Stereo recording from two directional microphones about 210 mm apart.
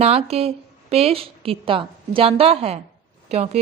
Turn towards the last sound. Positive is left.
turn(degrees=-30)  # may be behind; listen again after turning